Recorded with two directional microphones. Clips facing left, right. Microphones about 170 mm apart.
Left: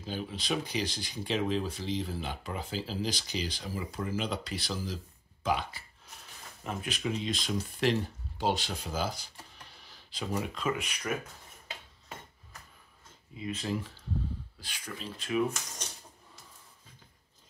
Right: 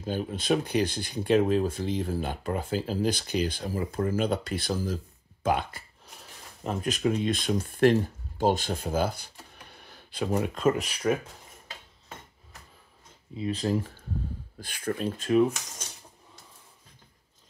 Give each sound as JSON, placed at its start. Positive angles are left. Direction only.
{"t": 0.0, "sound": "speech", "side_deg": -50}
{"t": 6.6, "sound": "speech", "side_deg": -40}
{"t": 13.4, "sound": "speech", "side_deg": -35}